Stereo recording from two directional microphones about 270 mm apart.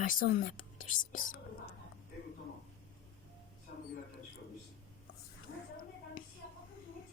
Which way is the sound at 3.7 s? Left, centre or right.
Left.